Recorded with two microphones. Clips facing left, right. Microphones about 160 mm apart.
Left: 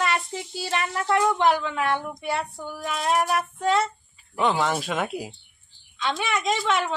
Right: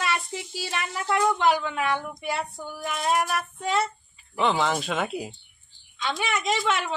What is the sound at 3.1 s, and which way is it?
Child singing, 25° left (ahead or behind).